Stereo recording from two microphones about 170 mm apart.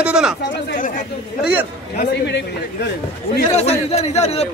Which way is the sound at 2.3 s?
80° left.